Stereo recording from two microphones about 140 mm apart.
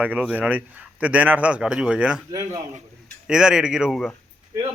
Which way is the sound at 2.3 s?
25° right (ahead or behind).